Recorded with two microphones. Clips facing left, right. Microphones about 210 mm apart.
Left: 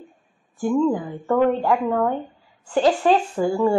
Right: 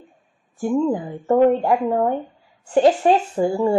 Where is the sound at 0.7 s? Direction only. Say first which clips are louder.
Even; 20° right (ahead or behind).